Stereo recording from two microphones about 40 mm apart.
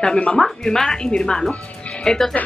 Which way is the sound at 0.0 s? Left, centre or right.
Left.